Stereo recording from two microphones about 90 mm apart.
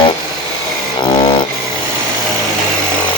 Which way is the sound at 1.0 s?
65° left (ahead or behind).